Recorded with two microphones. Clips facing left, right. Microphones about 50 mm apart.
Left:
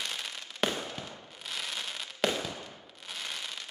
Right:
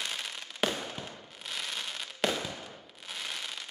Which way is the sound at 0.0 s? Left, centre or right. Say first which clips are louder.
Even; centre.